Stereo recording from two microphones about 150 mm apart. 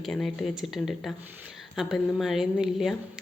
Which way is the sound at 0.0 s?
Centre (ahead or behind).